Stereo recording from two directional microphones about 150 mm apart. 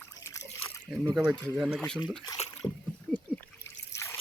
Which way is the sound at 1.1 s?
5° right (ahead or behind).